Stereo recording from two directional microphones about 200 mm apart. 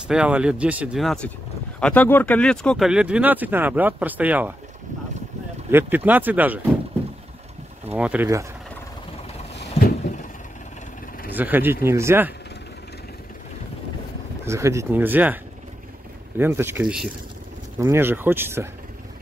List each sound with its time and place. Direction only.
0.1 s speech: 5° right (ahead or behind)
5.7 s speech: 10° right (ahead or behind)
7.9 s speech: 10° right (ahead or behind)
9.6 s a sound: 50° left (ahead or behind)
11.2 s speech: 10° right (ahead or behind)
14.4 s speech: 15° right (ahead or behind)